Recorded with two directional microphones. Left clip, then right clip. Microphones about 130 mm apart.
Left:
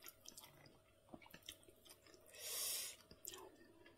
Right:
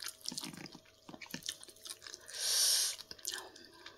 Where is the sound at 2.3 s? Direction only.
15° left (ahead or behind).